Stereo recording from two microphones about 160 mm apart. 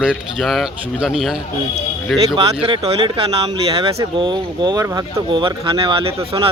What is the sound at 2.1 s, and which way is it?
Speech, 35° right (ahead or behind).